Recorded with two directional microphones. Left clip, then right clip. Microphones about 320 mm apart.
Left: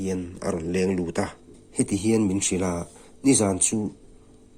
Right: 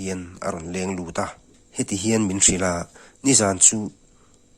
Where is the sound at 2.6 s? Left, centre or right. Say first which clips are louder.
Right 4 dB; right.